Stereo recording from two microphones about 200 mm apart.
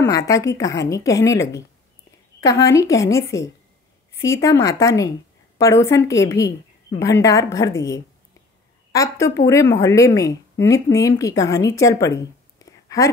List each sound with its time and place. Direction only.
0.3 s a woman's voice: 15° left (ahead or behind)